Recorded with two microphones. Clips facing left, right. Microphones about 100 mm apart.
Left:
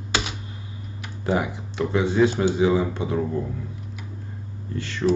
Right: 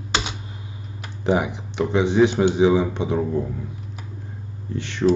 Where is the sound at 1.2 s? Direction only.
20° right (ahead or behind).